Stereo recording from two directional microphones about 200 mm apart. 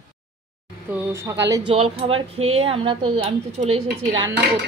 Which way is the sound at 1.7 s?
30° right (ahead or behind).